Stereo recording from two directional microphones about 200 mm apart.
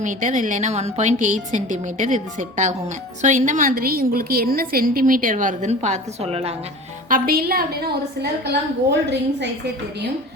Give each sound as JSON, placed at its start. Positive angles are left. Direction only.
{"t": 0.0, "sound": "a woman's voice", "side_deg": -40}
{"t": 7.1, "sound": "a woman's voice", "side_deg": -45}